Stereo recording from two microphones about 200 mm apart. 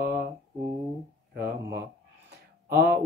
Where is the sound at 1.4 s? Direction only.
55° right (ahead or behind).